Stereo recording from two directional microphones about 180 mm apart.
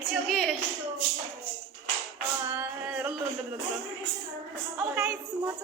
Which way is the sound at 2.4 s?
10° right (ahead or behind).